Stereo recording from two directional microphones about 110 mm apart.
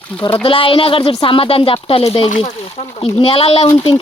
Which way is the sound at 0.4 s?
55° left (ahead or behind).